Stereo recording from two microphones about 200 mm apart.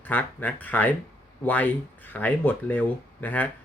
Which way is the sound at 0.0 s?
10° left (ahead or behind).